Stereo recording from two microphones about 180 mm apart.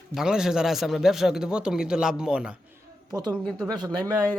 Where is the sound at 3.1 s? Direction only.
25° right (ahead or behind).